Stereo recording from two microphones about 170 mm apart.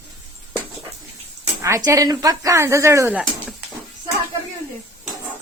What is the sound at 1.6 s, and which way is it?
Speech, 20° right (ahead or behind).